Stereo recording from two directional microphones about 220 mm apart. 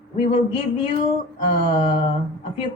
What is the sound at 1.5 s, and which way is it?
Speech, 25° left (ahead or behind).